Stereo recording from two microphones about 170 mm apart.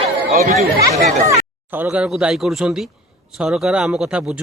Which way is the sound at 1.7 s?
10° right (ahead or behind).